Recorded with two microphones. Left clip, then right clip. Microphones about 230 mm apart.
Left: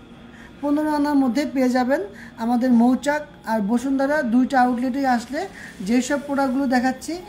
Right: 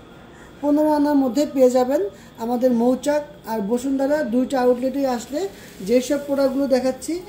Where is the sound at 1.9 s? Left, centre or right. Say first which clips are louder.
Right 1 dB; left.